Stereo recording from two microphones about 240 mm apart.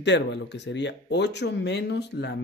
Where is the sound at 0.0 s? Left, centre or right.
Left.